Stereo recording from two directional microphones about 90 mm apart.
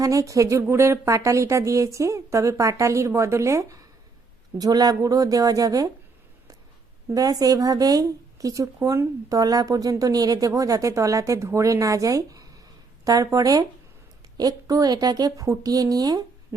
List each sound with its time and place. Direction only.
0.0 s speech: 40° right (ahead or behind)
4.6 s a woman's voice: 45° right (ahead or behind)
7.1 s a woman's voice: 40° right (ahead or behind)